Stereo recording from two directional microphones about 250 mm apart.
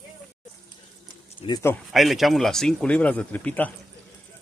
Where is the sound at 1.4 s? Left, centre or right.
Centre.